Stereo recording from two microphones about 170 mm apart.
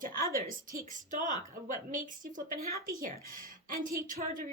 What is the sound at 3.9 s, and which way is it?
Speech, 55° right (ahead or behind).